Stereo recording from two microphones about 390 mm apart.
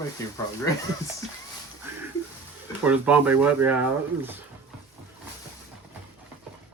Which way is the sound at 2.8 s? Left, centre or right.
Centre.